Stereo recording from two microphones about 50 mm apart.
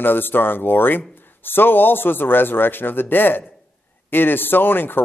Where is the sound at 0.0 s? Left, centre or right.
Left.